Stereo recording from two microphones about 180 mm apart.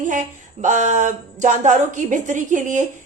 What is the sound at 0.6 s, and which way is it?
A woman's voice, 40° right (ahead or behind).